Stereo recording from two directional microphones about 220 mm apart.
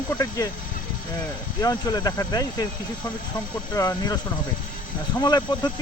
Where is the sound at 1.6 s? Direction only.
15° left (ahead or behind).